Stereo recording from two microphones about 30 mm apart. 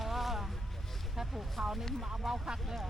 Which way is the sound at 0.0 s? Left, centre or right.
Centre.